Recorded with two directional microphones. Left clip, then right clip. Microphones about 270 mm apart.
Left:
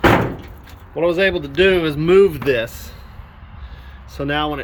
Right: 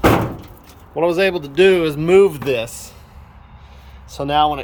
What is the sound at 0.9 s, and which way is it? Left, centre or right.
Speech, centre.